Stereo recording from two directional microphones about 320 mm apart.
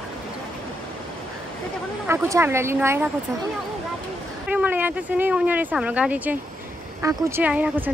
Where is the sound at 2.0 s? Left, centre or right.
Centre.